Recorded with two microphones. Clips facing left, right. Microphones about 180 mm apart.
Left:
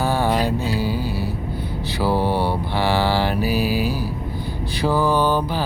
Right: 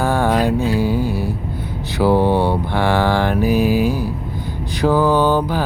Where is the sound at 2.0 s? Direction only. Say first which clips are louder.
Right 5 dB; 20° right (ahead or behind).